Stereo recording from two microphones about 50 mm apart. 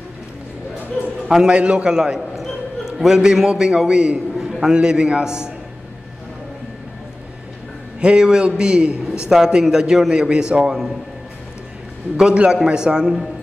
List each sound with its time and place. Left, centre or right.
1.5 s a man's voice: right
4.5 s a sound: centre
4.7 s a man's voice: centre
8.0 s a man's voice: centre
12.2 s a man's voice: centre